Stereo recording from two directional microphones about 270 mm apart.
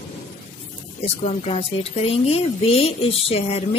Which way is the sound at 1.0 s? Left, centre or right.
Left.